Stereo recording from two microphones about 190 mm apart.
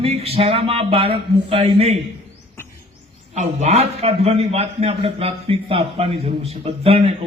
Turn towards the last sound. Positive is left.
turn(degrees=-30)  # may be behind; listen again after turning